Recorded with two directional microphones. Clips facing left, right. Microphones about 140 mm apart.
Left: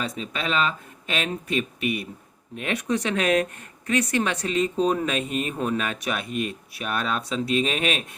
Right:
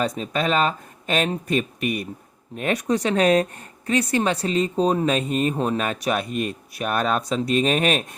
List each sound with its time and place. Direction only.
0.0 s speech: 40° right (ahead or behind)